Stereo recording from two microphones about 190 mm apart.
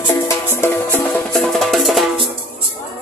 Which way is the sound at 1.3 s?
Centre (ahead or behind).